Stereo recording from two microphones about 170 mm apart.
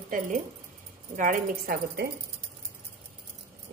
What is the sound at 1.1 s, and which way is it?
Speech, 50° right (ahead or behind).